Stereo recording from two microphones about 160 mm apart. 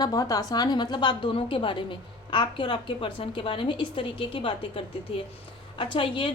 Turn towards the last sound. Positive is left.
turn(degrees=30)  # may be behind; listen again after turning